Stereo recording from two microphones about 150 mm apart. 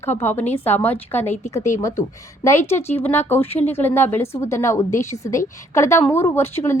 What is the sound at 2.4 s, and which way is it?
A woman's voice, 15° left (ahead or behind).